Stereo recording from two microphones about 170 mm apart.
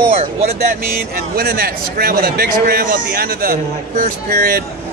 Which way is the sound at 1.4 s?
60° right (ahead or behind).